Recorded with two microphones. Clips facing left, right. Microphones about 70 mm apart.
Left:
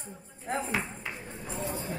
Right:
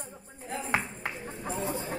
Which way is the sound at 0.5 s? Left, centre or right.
Left.